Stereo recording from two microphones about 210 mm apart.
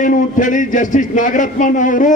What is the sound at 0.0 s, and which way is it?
A man's voice, 40° left (ahead or behind).